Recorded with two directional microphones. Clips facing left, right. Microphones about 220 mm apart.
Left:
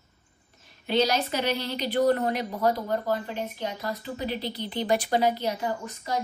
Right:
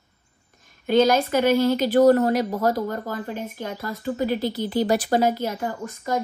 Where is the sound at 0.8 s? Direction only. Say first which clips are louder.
Right 6 dB; 50° right (ahead or behind).